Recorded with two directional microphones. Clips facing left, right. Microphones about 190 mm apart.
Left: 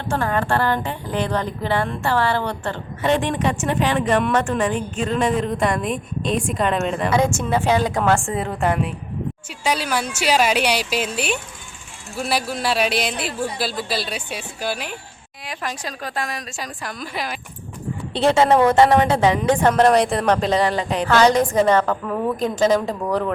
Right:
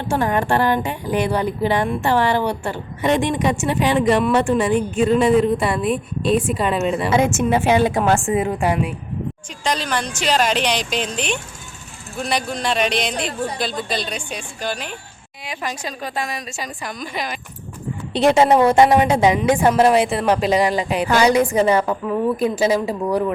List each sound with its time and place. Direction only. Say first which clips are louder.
0.1 s a woman's voice: right 2 dB; 15° right (ahead or behind)
9.6 s speech: even; 10° left (ahead or behind)
18.1 s a woman's voice: right 2 dB; 15° right (ahead or behind)